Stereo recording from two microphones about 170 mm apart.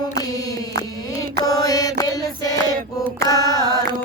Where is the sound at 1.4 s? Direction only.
20° left (ahead or behind).